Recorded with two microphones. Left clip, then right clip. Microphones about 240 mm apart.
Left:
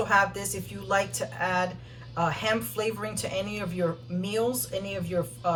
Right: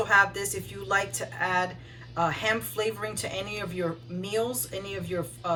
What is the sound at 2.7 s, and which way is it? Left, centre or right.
Speech, right.